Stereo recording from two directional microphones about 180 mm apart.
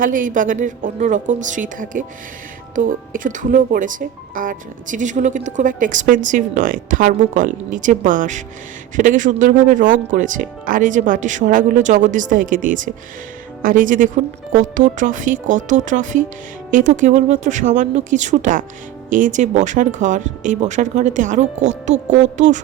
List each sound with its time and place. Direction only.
0.0 s speech: 50° right (ahead or behind)